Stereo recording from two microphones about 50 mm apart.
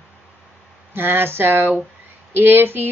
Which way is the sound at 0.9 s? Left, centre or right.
Right.